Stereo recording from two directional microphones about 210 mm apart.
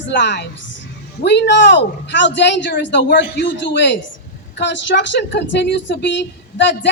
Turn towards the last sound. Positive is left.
turn(degrees=55)  # may be behind; listen again after turning